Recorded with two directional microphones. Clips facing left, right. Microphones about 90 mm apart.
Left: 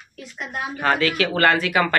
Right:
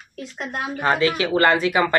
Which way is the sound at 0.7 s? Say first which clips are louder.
Right 1 dB; 20° right (ahead or behind).